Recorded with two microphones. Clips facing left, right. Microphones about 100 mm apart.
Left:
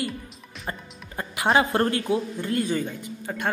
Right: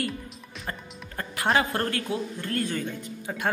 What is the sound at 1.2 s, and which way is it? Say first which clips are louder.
Music: left 3 dB; 15° left (ahead or behind).